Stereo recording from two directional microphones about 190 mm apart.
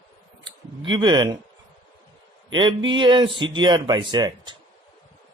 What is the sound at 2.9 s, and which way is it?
Speech, 25° right (ahead or behind).